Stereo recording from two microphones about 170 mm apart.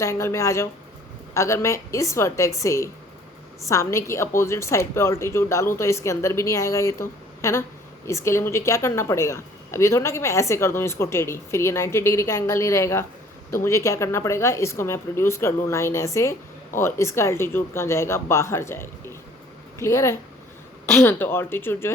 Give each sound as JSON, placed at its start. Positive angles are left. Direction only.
{"t": 0.0, "sound": "a woman's voice", "side_deg": 15}